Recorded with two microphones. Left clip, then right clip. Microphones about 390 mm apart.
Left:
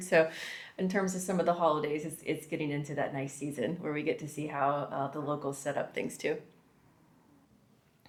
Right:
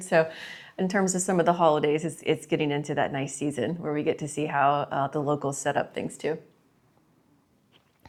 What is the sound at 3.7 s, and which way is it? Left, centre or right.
A woman's voice, right.